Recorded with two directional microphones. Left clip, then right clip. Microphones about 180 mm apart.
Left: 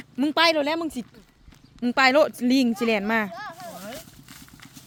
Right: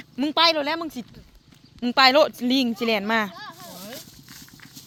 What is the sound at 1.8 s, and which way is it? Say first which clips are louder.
Speech: right 2 dB; 15° left (ahead or behind).